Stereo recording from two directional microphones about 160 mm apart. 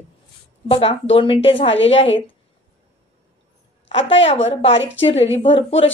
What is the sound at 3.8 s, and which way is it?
A woman's voice, 40° left (ahead or behind).